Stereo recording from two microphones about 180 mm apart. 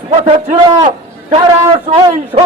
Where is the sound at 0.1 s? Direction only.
35° right (ahead or behind).